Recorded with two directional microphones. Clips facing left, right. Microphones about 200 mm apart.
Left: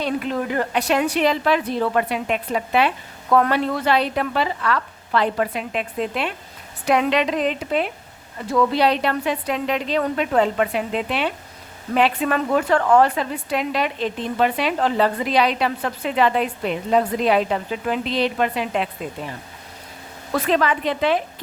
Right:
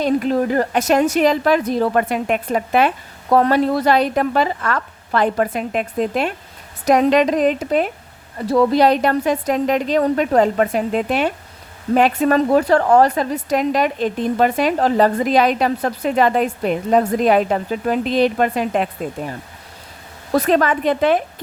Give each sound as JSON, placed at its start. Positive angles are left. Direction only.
{"t": 0.0, "sound": "a woman's voice", "side_deg": -40}
{"t": 20.3, "sound": "a woman's voice", "side_deg": -45}